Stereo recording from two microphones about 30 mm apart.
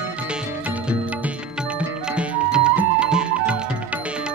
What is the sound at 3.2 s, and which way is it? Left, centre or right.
Music, right.